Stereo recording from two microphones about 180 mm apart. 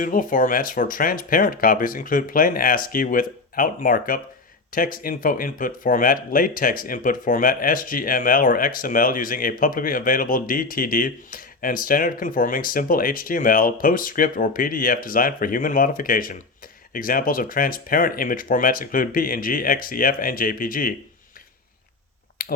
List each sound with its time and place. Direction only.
0.0 s speech: 50° left (ahead or behind)
22.4 s finger snapping: 55° left (ahead or behind)